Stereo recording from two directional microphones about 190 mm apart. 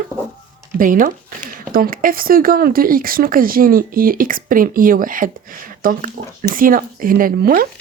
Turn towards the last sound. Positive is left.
turn(degrees=-50)  # may be behind; listen again after turning